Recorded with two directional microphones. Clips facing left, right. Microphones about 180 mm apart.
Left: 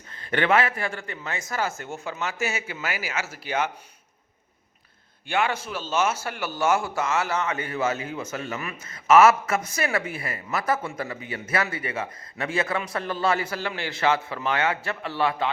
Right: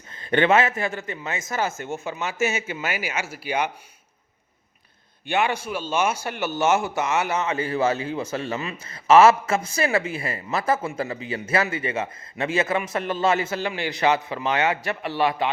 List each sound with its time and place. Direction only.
0.1 s a man's voice: 20° right (ahead or behind)
5.3 s a man's voice: 15° right (ahead or behind)